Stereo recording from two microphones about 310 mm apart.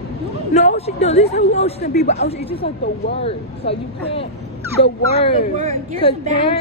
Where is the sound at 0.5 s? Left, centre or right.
Left.